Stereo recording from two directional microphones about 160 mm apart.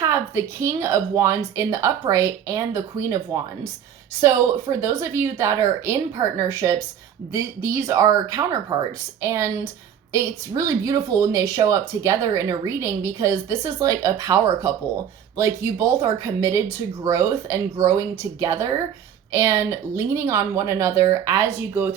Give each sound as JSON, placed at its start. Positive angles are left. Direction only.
{"t": 0.0, "sound": "speech", "side_deg": -15}
{"t": 4.8, "sound": "a woman's voice", "side_deg": -15}
{"t": 16.0, "sound": "speech", "side_deg": -20}